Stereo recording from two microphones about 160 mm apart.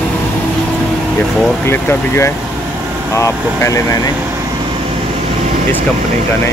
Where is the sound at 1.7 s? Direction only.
15° left (ahead or behind).